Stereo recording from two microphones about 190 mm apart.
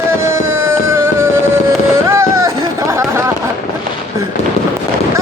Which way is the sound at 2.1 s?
15° right (ahead or behind).